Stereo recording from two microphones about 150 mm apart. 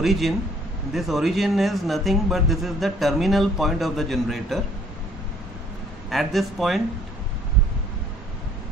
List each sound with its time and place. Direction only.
0.0 s speech: centre (ahead or behind)
6.0 s speech: centre (ahead or behind)